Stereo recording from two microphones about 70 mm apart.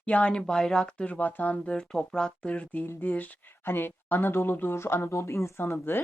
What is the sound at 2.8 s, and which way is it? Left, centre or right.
Speech, left.